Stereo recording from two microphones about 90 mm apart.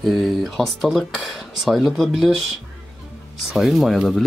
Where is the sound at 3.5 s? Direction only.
Centre (ahead or behind).